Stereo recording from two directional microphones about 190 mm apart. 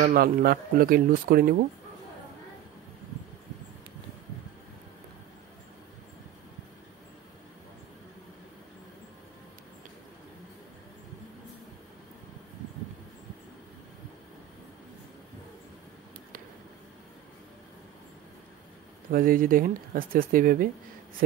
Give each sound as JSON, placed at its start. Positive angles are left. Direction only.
{"t": 0.0, "sound": "speech", "side_deg": -50}
{"t": 19.0, "sound": "speech", "side_deg": -45}